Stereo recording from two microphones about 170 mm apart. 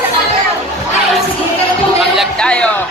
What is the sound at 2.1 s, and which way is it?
Music, 5° left (ahead or behind).